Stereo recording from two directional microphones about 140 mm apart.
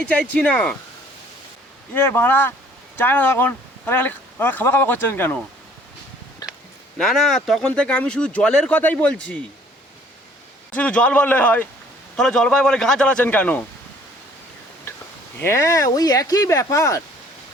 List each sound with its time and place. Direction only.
0.1 s speech: 10° left (ahead or behind)
1.9 s speech: 15° left (ahead or behind)
6.4 s a sound: 30° left (ahead or behind)
7.0 s speech: centre (ahead or behind)
10.8 s a man's voice: 10° left (ahead or behind)
14.9 s a sound: 20° left (ahead or behind)
15.4 s speech: 20° left (ahead or behind)